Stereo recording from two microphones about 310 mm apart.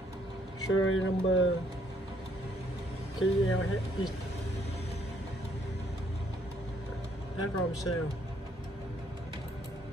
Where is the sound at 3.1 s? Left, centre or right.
Left.